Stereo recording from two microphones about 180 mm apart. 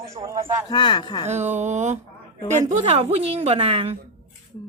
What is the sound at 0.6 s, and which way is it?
Speech, 25° left (ahead or behind).